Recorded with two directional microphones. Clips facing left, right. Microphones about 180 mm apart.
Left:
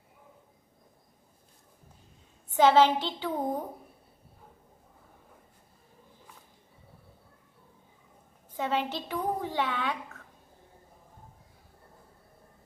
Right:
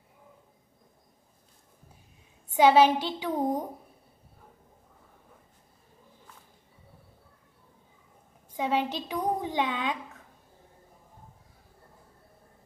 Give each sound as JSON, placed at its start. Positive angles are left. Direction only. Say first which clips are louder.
{"t": 2.5, "sound": "a woman's voice", "louder": "right 1 dB", "side_deg": -10}
{"t": 8.5, "sound": "a woman's voice", "louder": "right 2 dB", "side_deg": -15}